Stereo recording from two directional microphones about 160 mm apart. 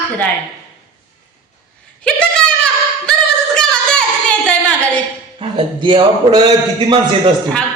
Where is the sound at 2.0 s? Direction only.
5° left (ahead or behind).